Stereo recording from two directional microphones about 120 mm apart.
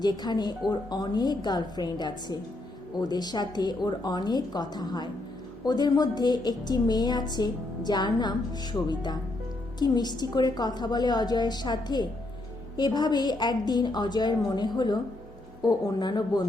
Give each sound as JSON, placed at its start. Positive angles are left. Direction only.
{"t": 0.0, "sound": "a woman's voice", "side_deg": 35}